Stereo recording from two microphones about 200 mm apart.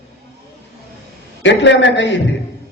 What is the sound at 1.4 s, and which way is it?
Speech, 65° left (ahead or behind).